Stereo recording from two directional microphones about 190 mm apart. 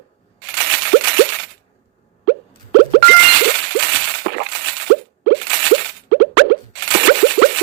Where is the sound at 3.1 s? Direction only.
55° right (ahead or behind).